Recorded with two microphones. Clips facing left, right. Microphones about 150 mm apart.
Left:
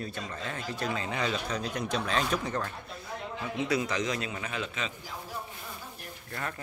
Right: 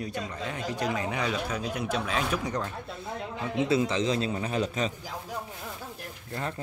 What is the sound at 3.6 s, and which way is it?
A man's voice, 25° right (ahead or behind).